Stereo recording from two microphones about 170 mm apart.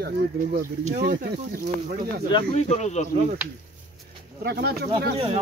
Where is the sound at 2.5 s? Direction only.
40° left (ahead or behind).